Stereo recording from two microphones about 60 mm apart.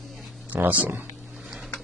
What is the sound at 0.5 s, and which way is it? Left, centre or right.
Speech, right.